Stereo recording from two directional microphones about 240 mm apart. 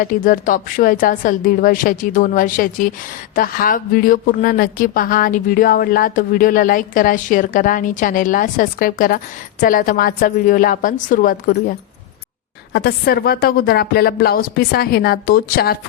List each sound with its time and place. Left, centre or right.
0.0 s speech: left
12.7 s speech: left